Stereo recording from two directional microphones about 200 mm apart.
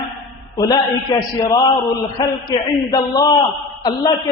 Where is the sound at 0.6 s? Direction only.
15° left (ahead or behind).